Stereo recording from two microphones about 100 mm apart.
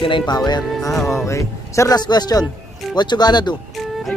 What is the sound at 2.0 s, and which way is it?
Speech, 45° left (ahead or behind).